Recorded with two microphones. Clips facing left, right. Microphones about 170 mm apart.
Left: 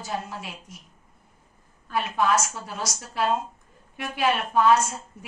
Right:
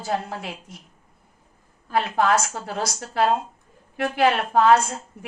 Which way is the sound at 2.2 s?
65° right (ahead or behind).